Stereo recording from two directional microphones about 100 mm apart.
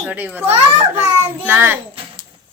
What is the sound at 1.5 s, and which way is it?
Speech, 20° right (ahead or behind).